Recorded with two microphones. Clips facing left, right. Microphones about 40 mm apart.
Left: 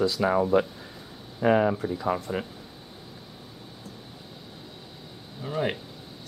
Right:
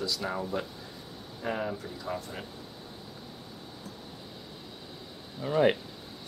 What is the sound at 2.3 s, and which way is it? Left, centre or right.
Speech, left.